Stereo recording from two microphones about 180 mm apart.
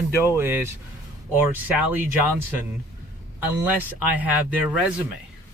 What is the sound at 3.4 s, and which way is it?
Speech, 10° right (ahead or behind).